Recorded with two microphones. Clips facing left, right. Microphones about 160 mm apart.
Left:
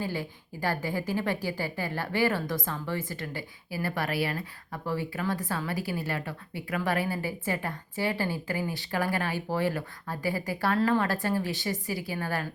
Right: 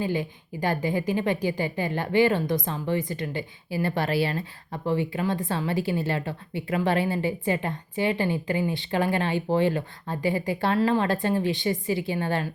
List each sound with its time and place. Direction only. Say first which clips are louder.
0.0 s a woman's voice: right 6 dB; 20° right (ahead or behind)